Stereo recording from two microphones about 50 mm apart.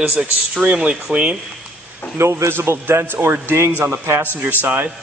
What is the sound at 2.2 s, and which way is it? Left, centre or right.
A man's voice, right.